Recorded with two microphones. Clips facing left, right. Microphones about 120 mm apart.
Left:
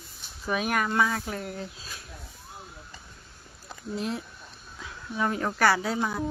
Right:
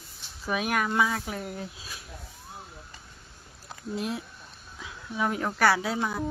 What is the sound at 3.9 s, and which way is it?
A woman's voice, 5° right (ahead or behind).